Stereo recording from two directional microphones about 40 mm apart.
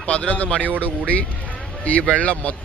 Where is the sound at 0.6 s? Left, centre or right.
Right.